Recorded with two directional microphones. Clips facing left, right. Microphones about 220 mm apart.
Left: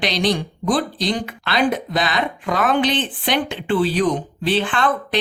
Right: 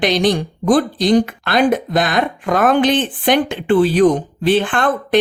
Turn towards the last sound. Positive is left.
turn(degrees=-50)  # may be behind; listen again after turning